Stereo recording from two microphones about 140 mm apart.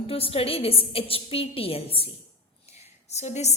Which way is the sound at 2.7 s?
50° left (ahead or behind).